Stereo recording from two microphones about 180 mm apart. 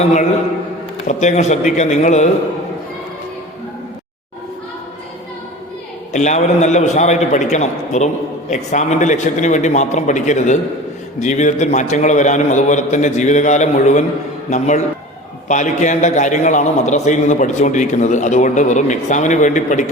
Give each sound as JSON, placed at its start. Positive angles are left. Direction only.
{"t": 0.0, "sound": "a man's voice", "side_deg": 40}
{"t": 6.1, "sound": "a man's voice", "side_deg": 40}
{"t": 15.4, "sound": "a man's voice", "side_deg": 40}